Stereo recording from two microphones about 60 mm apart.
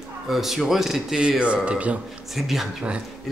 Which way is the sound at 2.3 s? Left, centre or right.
Centre.